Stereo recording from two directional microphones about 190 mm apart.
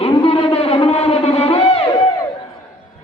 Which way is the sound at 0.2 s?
30° left (ahead or behind).